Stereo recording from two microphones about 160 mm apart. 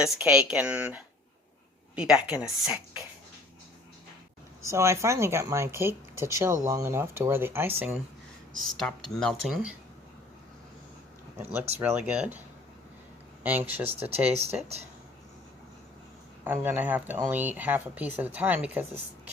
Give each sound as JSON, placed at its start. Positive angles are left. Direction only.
{"t": 0.0, "sound": "speech", "side_deg": -5}
{"t": 4.6, "sound": "speech", "side_deg": -15}
{"t": 8.7, "sound": "speech", "side_deg": 5}
{"t": 11.8, "sound": "speech", "side_deg": -10}
{"t": 13.4, "sound": "speech", "side_deg": -10}
{"t": 13.8, "sound": "speech", "side_deg": -40}
{"t": 16.4, "sound": "speech", "side_deg": -10}